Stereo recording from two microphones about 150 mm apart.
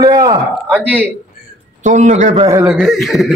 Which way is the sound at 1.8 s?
55° right (ahead or behind).